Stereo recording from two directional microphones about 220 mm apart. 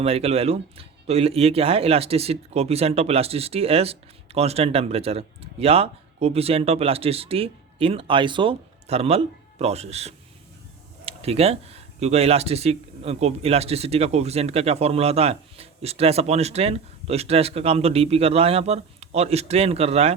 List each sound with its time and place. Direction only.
0.0 s speech: 25° right (ahead or behind)